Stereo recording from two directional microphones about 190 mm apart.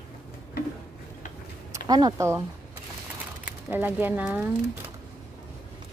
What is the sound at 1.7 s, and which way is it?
Speech, 20° right (ahead or behind).